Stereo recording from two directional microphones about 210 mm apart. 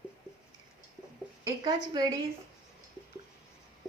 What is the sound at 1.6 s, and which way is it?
Speech, 20° right (ahead or behind).